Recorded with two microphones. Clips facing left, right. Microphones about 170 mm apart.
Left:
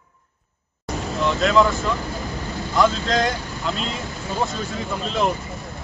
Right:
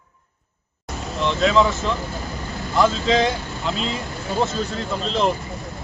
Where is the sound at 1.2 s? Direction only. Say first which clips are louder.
Even; centre (ahead or behind).